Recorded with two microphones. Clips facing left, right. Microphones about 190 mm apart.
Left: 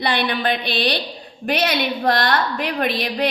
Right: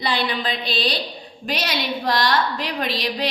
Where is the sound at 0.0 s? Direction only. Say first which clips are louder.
Left 3 dB; 60° left (ahead or behind).